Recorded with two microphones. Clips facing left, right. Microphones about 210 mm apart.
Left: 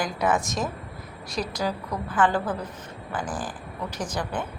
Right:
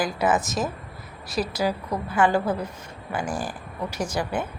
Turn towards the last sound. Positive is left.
turn(degrees=-10)  # may be behind; listen again after turning